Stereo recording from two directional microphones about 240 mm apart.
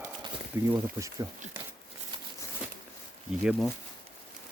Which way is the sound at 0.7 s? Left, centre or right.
Centre.